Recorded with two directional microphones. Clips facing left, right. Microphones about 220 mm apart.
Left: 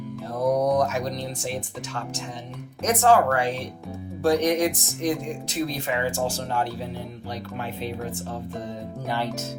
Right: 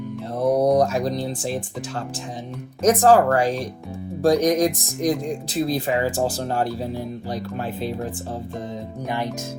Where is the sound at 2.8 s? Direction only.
35° right (ahead or behind).